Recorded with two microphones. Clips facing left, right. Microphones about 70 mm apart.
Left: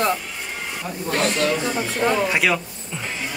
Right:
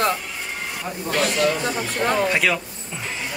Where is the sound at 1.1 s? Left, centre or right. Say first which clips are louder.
Even; left.